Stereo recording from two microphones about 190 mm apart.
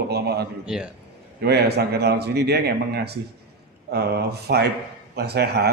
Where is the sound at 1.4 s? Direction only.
60° right (ahead or behind).